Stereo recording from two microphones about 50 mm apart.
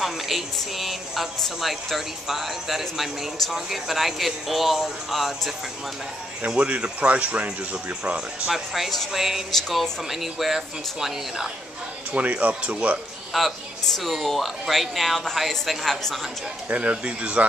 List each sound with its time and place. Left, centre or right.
0.0 s speech: centre
6.6 s speech: right
8.5 s speech: centre
9.5 s speech: centre
12.1 s speech: right
13.3 s speech: centre
16.6 s speech: right